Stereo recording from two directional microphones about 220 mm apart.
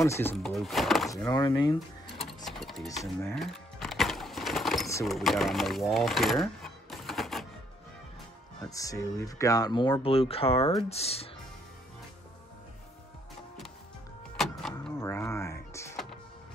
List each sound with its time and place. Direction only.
0.0 s speech: 10° left (ahead or behind)
1.1 s speech: 15° left (ahead or behind)
2.1 s sewing machine: centre (ahead or behind)
3.3 s a sound: centre (ahead or behind)
5.0 s speech: centre (ahead or behind)
8.6 s speech: 15° left (ahead or behind)
14.3 s power windows: centre (ahead or behind)
15.0 s music: 15° left (ahead or behind)